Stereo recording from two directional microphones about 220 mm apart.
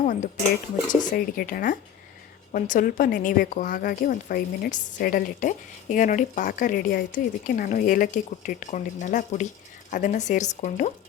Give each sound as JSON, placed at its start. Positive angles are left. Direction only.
{"t": 0.9, "sound": "a woman's voice", "side_deg": 40}